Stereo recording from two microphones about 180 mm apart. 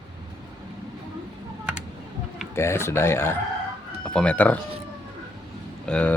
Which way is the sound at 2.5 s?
15° left (ahead or behind).